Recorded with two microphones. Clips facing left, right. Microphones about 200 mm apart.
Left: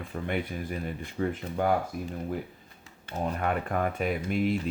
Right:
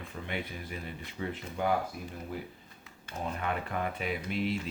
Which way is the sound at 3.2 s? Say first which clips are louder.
Left 5 dB; 50° left (ahead or behind).